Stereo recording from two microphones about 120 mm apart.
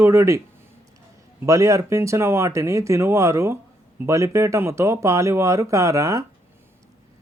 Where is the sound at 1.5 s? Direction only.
25° right (ahead or behind).